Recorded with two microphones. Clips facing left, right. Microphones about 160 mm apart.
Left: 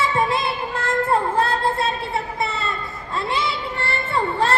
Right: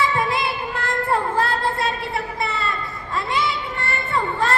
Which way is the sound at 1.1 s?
25° left (ahead or behind).